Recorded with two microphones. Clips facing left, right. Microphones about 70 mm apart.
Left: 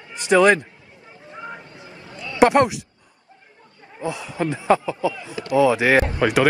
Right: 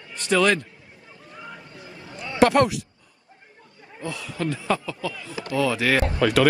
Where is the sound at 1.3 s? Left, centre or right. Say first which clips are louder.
Left 5 dB; left.